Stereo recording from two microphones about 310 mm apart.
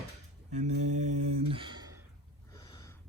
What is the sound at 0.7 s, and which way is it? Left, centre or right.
Mantra, right.